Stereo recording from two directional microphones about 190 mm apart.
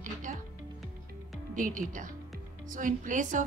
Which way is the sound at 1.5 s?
45° right (ahead or behind).